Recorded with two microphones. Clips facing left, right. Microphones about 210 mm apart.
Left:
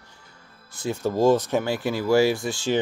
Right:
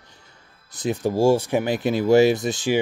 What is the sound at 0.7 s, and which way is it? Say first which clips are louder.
Speech: right 3 dB; 20° right (ahead or behind).